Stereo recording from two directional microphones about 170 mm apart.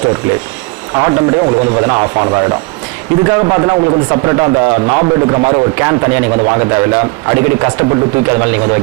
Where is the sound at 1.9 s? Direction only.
15° right (ahead or behind).